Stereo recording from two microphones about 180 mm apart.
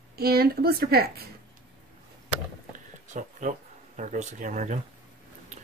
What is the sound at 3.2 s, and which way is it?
Speech, 45° right (ahead or behind).